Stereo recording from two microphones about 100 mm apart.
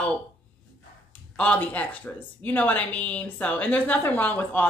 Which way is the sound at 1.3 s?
15° left (ahead or behind).